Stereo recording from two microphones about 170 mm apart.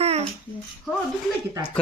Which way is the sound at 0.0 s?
35° right (ahead or behind).